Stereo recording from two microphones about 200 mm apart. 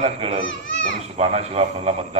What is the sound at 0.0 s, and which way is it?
A man's voice, 30° right (ahead or behind).